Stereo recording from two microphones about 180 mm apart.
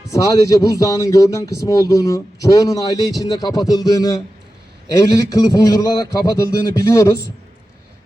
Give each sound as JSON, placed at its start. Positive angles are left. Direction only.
{"t": 0.1, "sound": "speech", "side_deg": 20}